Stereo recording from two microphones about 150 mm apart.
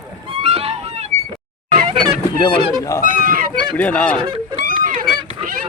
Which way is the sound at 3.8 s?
10° left (ahead or behind).